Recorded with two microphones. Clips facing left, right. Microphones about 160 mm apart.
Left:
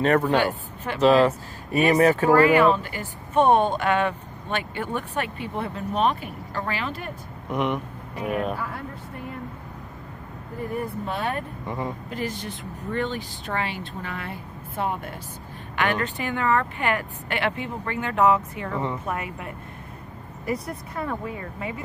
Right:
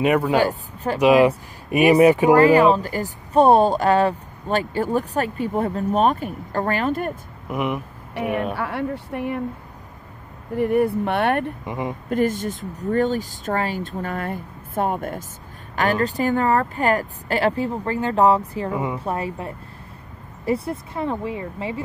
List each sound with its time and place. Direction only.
0.0 s speech: 10° right (ahead or behind)
0.4 s a woman's voice: 40° right (ahead or behind)
0.9 s speech: 15° right (ahead or behind)
2.4 s speech: 35° right (ahead or behind)
7.4 s speech: 5° right (ahead or behind)
8.5 s speech: 75° right (ahead or behind)
10.6 s speech: 70° right (ahead or behind)
11.6 s speech: 15° right (ahead or behind)
12.1 s speech: 50° right (ahead or behind); by 18.7 s 35° right (ahead or behind)
18.7 s speech: 10° right (ahead or behind)
18.9 s speech: 30° right (ahead or behind)